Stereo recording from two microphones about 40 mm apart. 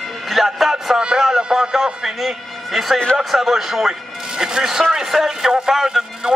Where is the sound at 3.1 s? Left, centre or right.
Centre.